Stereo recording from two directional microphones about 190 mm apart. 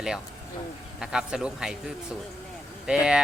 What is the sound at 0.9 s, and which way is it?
Speech, 5° right (ahead or behind).